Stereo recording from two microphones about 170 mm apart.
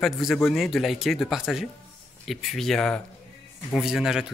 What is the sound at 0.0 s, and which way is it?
Speech, centre (ahead or behind).